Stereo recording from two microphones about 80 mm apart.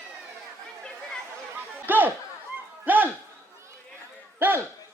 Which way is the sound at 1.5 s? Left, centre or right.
Right.